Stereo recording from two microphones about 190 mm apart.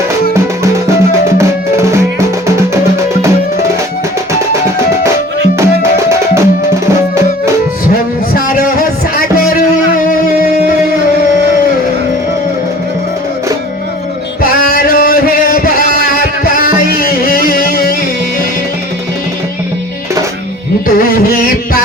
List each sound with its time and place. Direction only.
1.4 s music: 15° right (ahead or behind)
5.5 s music: 15° right (ahead or behind)
8.3 s music: 50° left (ahead or behind)
14.7 s a sound: 50° left (ahead or behind)
16.9 s music: 50° left (ahead or behind)
20.8 s music: 50° left (ahead or behind)